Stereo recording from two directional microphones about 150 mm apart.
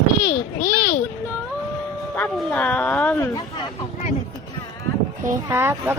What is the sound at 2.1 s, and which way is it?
Speech, 10° left (ahead or behind).